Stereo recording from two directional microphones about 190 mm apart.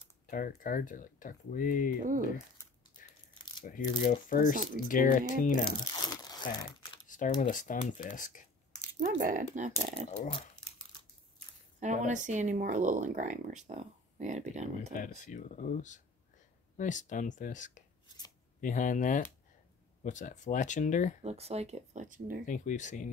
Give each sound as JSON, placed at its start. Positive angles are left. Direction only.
{"t": 0.3, "sound": "speech", "side_deg": 45}
{"t": 3.6, "sound": "speech", "side_deg": 45}
{"t": 5.7, "sound": "crumpling", "side_deg": 20}
{"t": 7.1, "sound": "a sound", "side_deg": 45}
{"t": 7.4, "sound": "speech", "side_deg": 45}
{"t": 9.2, "sound": "speech", "side_deg": -40}
{"t": 10.1, "sound": "speech", "side_deg": 30}
{"t": 11.8, "sound": "speech", "side_deg": -40}
{"t": 15.0, "sound": "speech", "side_deg": 40}
{"t": 21.2, "sound": "speech", "side_deg": -35}
{"t": 22.5, "sound": "speech", "side_deg": 40}